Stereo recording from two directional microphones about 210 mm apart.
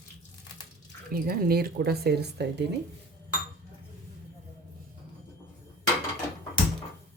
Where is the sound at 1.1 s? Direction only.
45° right (ahead or behind).